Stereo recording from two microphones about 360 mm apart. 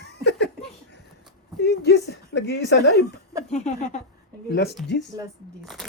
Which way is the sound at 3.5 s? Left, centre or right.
Centre.